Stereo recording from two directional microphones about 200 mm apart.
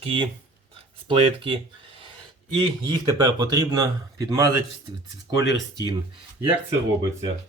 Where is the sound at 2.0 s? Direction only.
25° right (ahead or behind).